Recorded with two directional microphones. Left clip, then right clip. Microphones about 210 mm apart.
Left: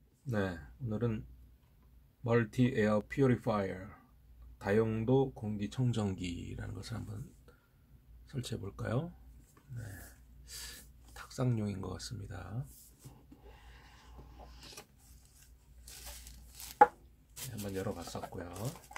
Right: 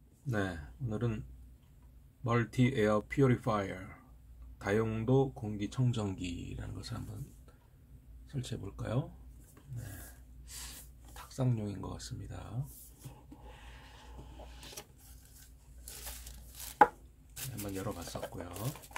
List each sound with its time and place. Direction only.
0.3 s speech: 20° left (ahead or behind)
2.2 s speech: 20° left (ahead or behind)
8.3 s speech: 25° left (ahead or behind)
10.4 s speech: 25° left (ahead or behind)
16.6 s chopping: 5° right (ahead or behind)
17.7 s speech: 25° left (ahead or behind)